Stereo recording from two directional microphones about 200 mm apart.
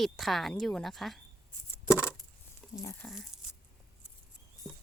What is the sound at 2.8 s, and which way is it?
Speech, 15° left (ahead or behind).